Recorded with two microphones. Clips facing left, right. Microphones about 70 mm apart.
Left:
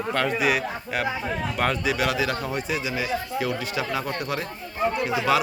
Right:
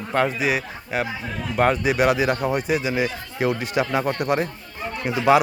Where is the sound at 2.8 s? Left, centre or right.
Right.